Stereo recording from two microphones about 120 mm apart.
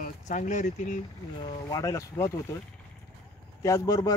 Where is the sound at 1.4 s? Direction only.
30° left (ahead or behind).